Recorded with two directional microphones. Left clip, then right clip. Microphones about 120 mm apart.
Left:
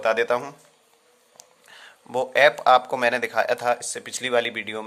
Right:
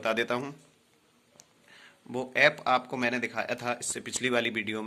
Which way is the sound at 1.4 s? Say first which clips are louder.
Left 8 dB; 40° left (ahead or behind).